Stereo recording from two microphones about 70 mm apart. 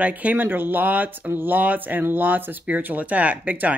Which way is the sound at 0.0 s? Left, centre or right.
Right.